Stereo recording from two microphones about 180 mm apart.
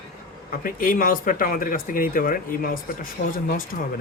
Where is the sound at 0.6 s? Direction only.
50° left (ahead or behind).